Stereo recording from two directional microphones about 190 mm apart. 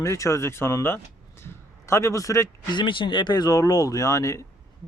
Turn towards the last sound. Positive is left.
turn(degrees=15)  # may be behind; listen again after turning